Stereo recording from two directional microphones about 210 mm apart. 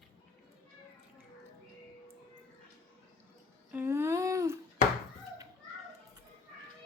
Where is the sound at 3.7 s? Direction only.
10° right (ahead or behind).